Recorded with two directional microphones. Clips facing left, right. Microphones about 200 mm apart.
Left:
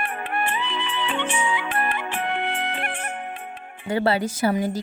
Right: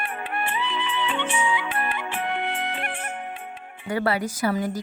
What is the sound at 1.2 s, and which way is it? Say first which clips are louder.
Music: even; 45° left (ahead or behind).